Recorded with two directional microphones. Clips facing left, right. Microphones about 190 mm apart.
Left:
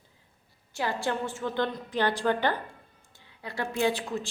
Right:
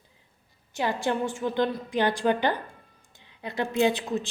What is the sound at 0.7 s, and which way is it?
A woman's voice, 20° right (ahead or behind).